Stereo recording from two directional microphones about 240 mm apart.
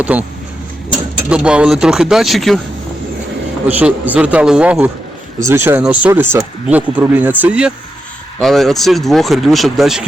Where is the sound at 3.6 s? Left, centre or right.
Centre.